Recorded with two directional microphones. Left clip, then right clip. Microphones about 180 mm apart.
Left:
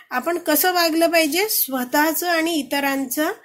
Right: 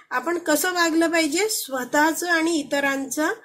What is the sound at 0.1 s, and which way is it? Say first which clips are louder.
Speech: left 1 dB; 45° left (ahead or behind).